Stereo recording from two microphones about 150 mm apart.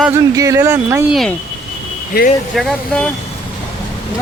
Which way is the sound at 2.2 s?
90° left.